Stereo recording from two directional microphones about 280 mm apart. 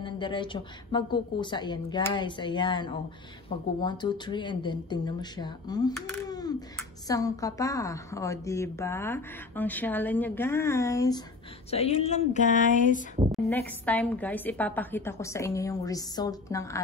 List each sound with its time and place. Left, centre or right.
0.0 s speech: centre
13.3 s speech: centre